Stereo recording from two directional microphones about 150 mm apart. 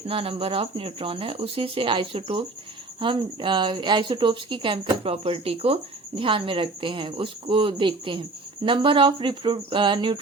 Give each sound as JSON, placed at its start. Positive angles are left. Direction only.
{"t": 0.1, "sound": "speech", "side_deg": -40}